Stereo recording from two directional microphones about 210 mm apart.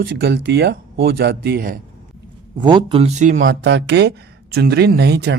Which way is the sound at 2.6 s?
20° right (ahead or behind).